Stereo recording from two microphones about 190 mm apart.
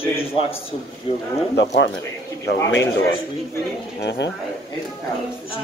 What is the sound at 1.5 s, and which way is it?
Speech, 70° left (ahead or behind).